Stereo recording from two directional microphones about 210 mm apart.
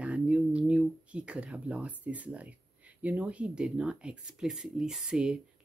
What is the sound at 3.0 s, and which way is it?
Speech, 5° right (ahead or behind).